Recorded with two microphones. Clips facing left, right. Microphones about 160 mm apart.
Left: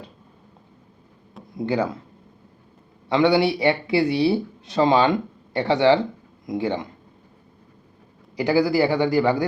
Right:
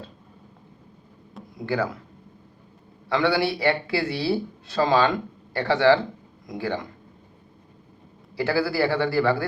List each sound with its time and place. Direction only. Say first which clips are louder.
1.5 s speech: left 3 dB; 20° left (ahead or behind)
3.1 s speech: left 4 dB; 20° left (ahead or behind)
8.4 s a man's voice: left 4 dB; 15° left (ahead or behind)